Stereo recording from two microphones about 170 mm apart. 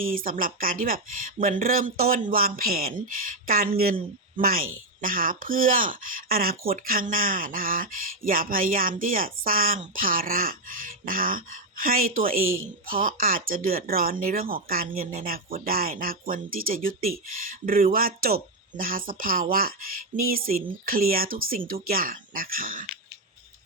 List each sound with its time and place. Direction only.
0.0 s speech: 55° right (ahead or behind)